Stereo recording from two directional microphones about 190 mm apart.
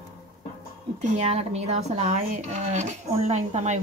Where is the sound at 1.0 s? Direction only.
35° right (ahead or behind).